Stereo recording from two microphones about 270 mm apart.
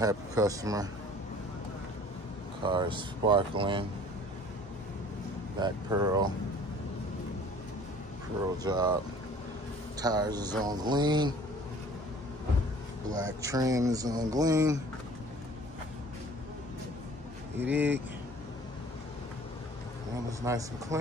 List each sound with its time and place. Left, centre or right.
0.0 s speech: centre
2.6 s speech: centre
5.6 s speech: centre
8.6 s speech: centre
9.9 s speech: centre
13.4 s speech: centre
17.6 s speech: centre
20.4 s speech: centre